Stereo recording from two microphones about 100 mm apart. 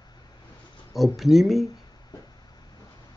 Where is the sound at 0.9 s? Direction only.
Centre (ahead or behind).